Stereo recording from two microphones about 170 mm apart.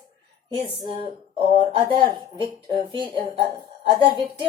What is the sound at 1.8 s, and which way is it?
A woman's voice, 30° right (ahead or behind).